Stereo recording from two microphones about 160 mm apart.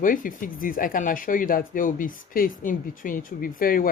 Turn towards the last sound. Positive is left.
turn(degrees=60)  # may be behind; listen again after turning